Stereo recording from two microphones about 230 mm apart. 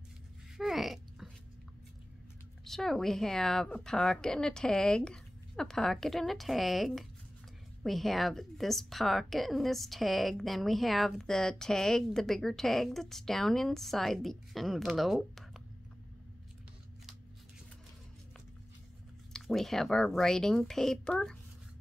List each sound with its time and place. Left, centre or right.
0.6 s a sound: centre
2.6 s a woman's voice: centre
19.3 s a woman's voice: centre